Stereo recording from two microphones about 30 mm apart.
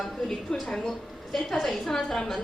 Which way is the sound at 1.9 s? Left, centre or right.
Left.